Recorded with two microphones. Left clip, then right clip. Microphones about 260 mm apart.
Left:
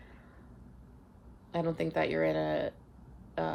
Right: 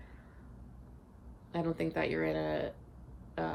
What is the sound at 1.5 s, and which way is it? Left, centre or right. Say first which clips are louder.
Speech: left 3 dB; left.